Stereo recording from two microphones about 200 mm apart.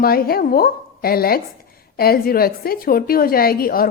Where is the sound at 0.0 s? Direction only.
50° left (ahead or behind).